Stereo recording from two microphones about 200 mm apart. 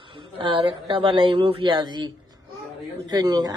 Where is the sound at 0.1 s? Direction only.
25° right (ahead or behind).